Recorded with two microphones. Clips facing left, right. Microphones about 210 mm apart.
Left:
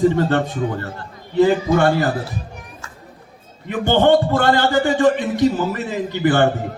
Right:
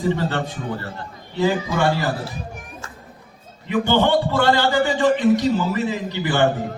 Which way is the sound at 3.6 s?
50° left (ahead or behind).